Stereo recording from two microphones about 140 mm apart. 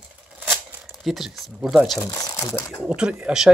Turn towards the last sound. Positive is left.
turn(degrees=-5)  # may be behind; listen again after turning